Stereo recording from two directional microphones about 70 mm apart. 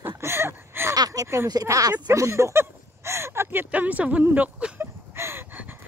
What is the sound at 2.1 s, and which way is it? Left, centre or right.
Speech, right.